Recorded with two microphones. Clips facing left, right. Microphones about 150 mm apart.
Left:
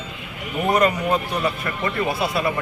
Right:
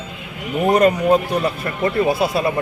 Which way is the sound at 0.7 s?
40° right (ahead or behind).